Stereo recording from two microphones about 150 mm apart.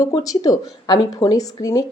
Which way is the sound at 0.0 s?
25° left (ahead or behind).